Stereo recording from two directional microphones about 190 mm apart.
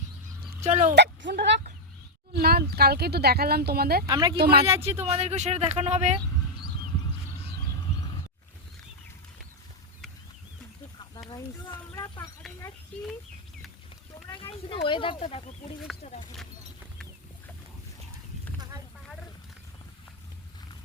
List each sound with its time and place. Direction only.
0.6 s speech: 40° right (ahead or behind)
0.9 s speech: 60° right (ahead or behind)
4.0 s speech: 20° right (ahead or behind)
4.4 s speech: 55° right (ahead or behind)
5.0 s speech: 35° right (ahead or behind)
11.3 s a sound: 20° left (ahead or behind)
14.7 s speech: 25° left (ahead or behind)